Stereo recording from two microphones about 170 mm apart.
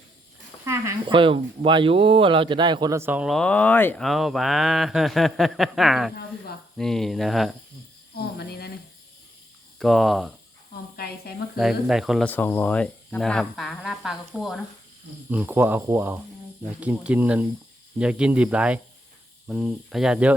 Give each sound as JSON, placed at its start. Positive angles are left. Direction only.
{"t": 0.6, "sound": "speech", "side_deg": -20}
{"t": 1.1, "sound": "speech", "side_deg": -30}
{"t": 4.0, "sound": "speech", "side_deg": 0}
{"t": 8.4, "sound": "speech", "side_deg": 70}
{"t": 9.7, "sound": "speech", "side_deg": 0}
{"t": 10.9, "sound": "speech", "side_deg": 70}
{"t": 11.5, "sound": "speech", "side_deg": 0}
{"t": 12.3, "sound": "speech", "side_deg": 10}